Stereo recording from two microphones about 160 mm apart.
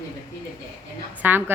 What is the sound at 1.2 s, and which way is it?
Speech, 10° right (ahead or behind).